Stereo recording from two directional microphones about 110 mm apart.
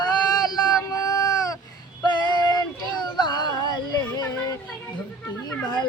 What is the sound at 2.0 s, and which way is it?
Female singing, 40° left (ahead or behind).